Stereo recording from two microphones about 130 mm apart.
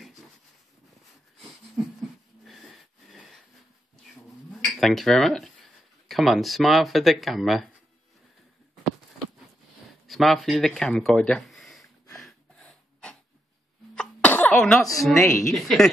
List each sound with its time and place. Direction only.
2.4 s wheeze: centre (ahead or behind)
4.5 s speech: centre (ahead or behind)
10.0 s speech: centre (ahead or behind)
12.2 s snort: 5° left (ahead or behind)
13.9 s cough: 10° left (ahead or behind)
15.1 s speech: 20° left (ahead or behind)
15.4 s speech: centre (ahead or behind)